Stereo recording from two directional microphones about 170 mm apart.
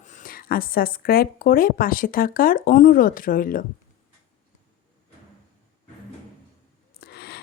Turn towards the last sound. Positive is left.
turn(degrees=70)  # may be behind; listen again after turning